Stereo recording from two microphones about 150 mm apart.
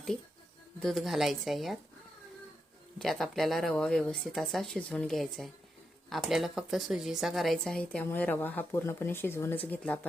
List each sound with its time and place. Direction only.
0.8 s speech: centre (ahead or behind)
3.0 s a woman's voice: centre (ahead or behind)